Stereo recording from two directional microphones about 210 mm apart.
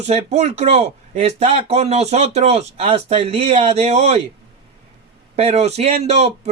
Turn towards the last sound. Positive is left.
turn(degrees=-30)  # may be behind; listen again after turning